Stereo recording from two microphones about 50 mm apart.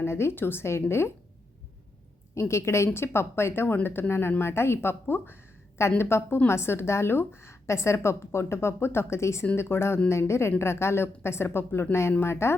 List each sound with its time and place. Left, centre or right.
0.0 s a woman's voice: left
2.3 s a woman's voice: left